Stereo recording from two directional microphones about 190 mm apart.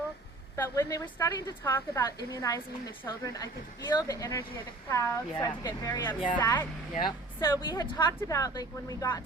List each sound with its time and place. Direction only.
0.5 s a woman's voice: 15° left (ahead or behind)